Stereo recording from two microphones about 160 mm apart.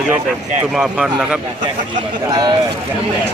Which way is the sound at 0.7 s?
5° right (ahead or behind).